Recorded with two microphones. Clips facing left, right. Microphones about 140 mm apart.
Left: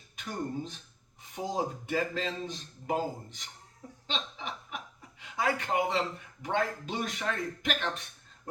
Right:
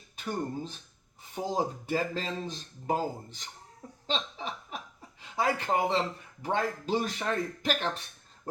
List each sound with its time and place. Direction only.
0.2 s a man's voice: 30° right (ahead or behind)
4.0 s snicker: 35° right (ahead or behind)
5.2 s a man's voice: 35° right (ahead or behind)